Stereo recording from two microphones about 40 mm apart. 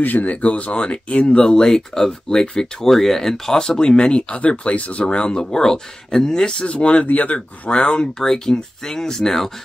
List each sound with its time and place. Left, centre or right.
0.0 s speech: left
1.3 s speech: centre
6.6 s speech: left
8.2 s speech: centre